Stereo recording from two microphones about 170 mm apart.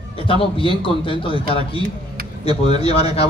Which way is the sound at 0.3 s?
30° left (ahead or behind).